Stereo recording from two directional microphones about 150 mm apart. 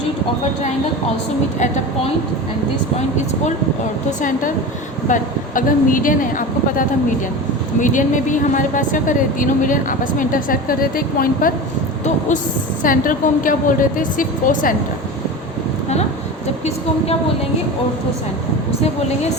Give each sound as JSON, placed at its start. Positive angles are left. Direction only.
{"t": 1.5, "sound": "a woman's voice", "side_deg": 55}
{"t": 4.2, "sound": "speech", "side_deg": 60}
{"t": 12.8, "sound": "speech", "side_deg": 65}